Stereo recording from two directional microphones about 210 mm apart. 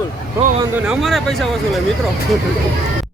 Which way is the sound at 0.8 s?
Centre (ahead or behind).